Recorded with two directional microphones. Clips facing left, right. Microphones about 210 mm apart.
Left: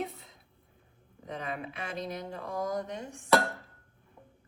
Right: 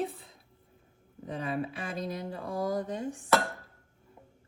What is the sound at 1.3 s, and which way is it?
Speech, 35° right (ahead or behind).